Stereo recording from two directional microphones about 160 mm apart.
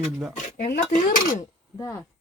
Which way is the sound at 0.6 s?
90° left.